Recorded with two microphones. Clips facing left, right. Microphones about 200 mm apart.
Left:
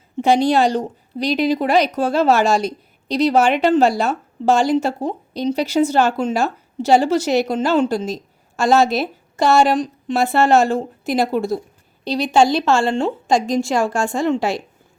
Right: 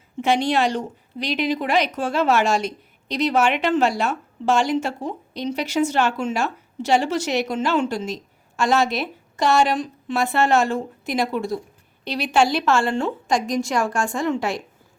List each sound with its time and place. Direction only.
0.2 s a woman's voice: 35° left (ahead or behind)